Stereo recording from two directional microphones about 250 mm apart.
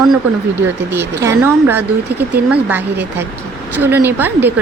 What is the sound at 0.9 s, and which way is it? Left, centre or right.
A woman's voice, centre.